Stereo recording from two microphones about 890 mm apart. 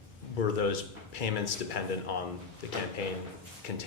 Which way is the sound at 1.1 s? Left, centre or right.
Left.